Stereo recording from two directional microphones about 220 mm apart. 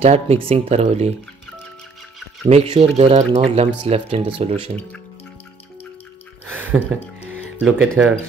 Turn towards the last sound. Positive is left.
turn(degrees=-5)  # may be behind; listen again after turning